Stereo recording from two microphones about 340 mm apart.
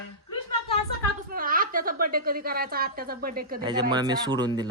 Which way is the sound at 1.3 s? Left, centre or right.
Right.